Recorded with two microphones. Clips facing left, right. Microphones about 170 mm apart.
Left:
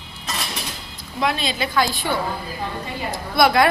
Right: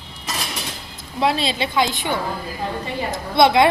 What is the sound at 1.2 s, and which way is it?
A woman's voice, 30° right (ahead or behind).